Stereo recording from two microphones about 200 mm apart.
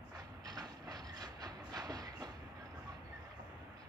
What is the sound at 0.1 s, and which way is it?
Train, 20° right (ahead or behind).